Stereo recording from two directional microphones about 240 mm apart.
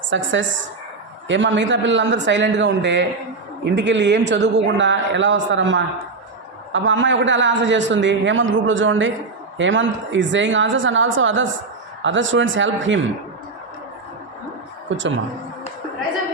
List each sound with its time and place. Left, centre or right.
0.1 s a man's voice: right
14.8 s speech: right